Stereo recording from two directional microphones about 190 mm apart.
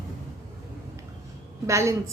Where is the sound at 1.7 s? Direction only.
15° right (ahead or behind).